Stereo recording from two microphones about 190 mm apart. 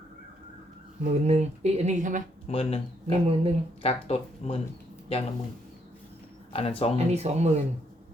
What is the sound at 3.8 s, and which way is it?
Speech, 30° left (ahead or behind).